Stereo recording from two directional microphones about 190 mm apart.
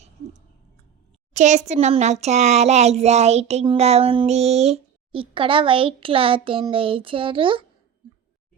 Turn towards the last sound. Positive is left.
turn(degrees=-25)  # may be behind; listen again after turning